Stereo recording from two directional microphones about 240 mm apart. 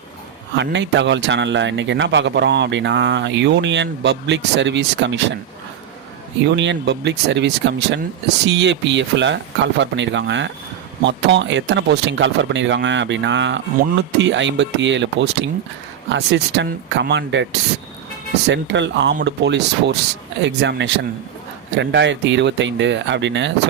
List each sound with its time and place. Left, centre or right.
0.5 s speech: right
6.6 s speech: right